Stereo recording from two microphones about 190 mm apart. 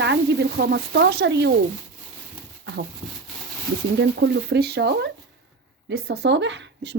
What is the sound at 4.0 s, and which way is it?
Speech, 70° right (ahead or behind).